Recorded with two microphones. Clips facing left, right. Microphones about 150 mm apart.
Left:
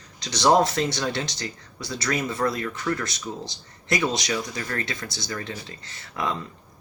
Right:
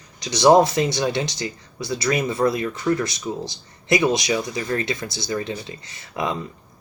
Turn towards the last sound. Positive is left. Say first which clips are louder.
# right 3 dB
turn(degrees=-15)  # may be behind; listen again after turning